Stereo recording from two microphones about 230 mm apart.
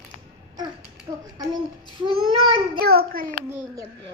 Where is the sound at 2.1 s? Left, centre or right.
Right.